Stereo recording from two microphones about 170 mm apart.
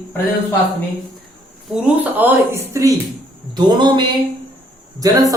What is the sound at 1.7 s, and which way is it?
A woman's voice, 10° right (ahead or behind).